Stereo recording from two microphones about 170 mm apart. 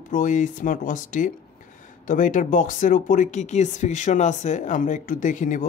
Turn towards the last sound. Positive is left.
turn(degrees=50)  # may be behind; listen again after turning